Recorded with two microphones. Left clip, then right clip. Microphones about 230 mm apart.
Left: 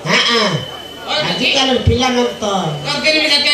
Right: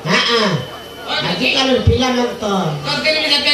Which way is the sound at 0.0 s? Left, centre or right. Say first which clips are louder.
Left 1 dB; left.